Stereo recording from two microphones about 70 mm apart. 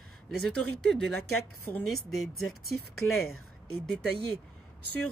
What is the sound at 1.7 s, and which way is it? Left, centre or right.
Speech, left.